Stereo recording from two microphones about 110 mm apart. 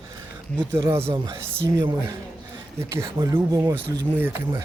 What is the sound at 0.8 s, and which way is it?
Speech, 25° right (ahead or behind).